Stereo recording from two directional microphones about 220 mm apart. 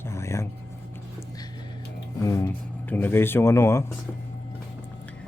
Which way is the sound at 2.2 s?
15° left (ahead or behind).